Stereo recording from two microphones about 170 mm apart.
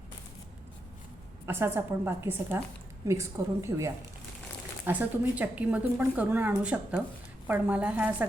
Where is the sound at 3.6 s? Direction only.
20° right (ahead or behind).